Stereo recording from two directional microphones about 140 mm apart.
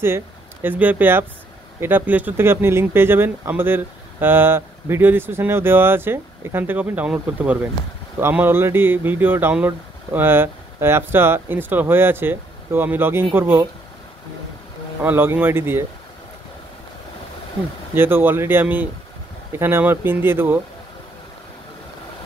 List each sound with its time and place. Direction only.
0.0 s speech: 15° right (ahead or behind)
15.0 s speech: 15° right (ahead or behind)
17.9 s speech: 15° right (ahead or behind)